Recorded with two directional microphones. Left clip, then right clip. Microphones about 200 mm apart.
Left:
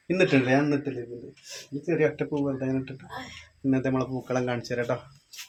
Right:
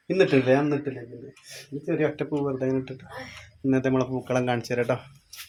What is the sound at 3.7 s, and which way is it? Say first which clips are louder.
Speech: right 3 dB; 35° right (ahead or behind).